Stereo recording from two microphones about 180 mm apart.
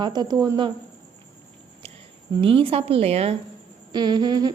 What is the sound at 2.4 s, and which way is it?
Speech, 30° right (ahead or behind).